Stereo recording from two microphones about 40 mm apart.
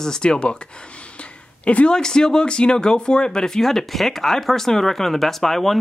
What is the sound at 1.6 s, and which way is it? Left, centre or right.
Speech, left.